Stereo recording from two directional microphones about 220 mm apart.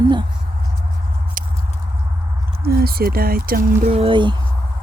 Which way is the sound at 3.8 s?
25° right (ahead or behind).